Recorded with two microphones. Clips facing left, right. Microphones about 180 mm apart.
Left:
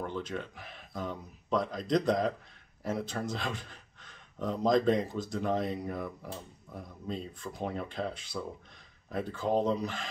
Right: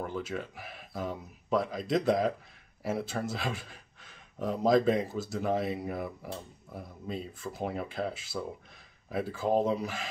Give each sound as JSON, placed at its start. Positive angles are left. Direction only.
{"t": 0.0, "sound": "speech", "side_deg": -5}